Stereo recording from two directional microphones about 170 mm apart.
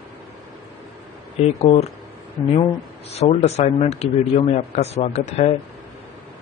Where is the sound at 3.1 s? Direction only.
40° left (ahead or behind).